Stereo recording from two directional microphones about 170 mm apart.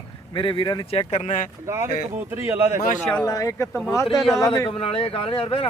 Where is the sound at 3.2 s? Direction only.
20° left (ahead or behind).